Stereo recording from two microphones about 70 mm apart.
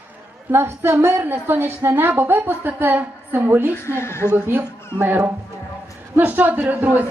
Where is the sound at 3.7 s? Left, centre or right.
Left.